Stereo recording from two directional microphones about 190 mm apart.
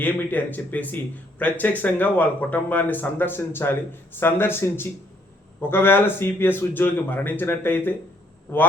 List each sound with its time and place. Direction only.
0.0 s speech: 10° left (ahead or behind)